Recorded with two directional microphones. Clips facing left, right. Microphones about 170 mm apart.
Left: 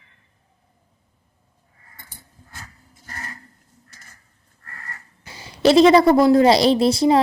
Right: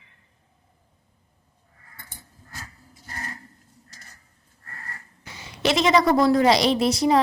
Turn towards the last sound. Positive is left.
turn(degrees=30)  # may be behind; listen again after turning